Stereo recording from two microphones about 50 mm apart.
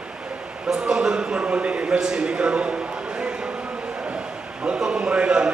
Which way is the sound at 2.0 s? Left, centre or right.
Centre.